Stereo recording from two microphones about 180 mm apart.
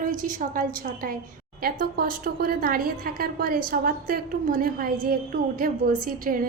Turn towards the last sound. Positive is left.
turn(degrees=-50)  # may be behind; listen again after turning